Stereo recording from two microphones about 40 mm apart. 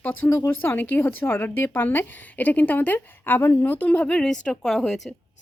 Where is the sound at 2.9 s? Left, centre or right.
Left.